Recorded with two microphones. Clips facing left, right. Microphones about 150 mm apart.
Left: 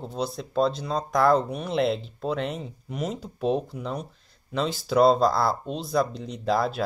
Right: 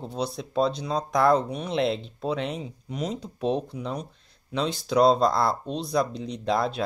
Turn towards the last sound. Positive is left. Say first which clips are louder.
# left 1 dB
turn(degrees=0)  # may be behind; listen again after turning